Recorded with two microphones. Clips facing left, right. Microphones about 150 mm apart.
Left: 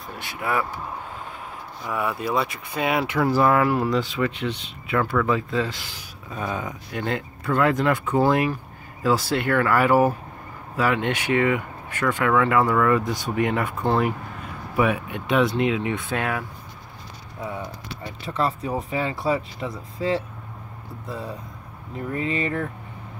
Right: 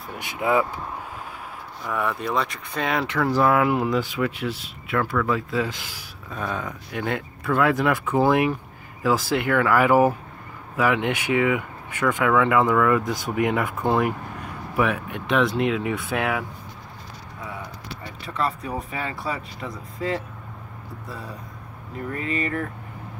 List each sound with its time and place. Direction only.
0.2 s speech: 20° right (ahead or behind)
1.9 s speech: 5° left (ahead or behind)
3.6 s speech: 15° right (ahead or behind)
5.6 s speech: 15° right (ahead or behind)
6.3 s speech: 5° left (ahead or behind)
7.0 s speech: 5° right (ahead or behind)
18.2 s speech: 30° left (ahead or behind)
22.1 s speech: 30° left (ahead or behind)